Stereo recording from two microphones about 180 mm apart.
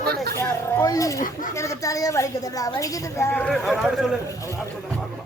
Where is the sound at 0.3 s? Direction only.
15° left (ahead or behind).